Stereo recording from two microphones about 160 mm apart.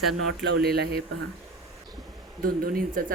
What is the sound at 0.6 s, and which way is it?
Speech, 85° right.